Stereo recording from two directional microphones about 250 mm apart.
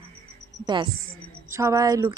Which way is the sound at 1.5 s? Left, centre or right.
Centre.